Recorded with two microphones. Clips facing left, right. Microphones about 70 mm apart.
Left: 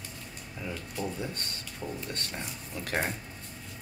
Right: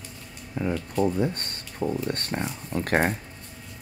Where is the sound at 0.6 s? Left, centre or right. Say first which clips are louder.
Right 11 dB; right.